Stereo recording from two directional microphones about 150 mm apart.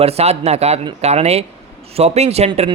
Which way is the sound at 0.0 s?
45° right (ahead or behind).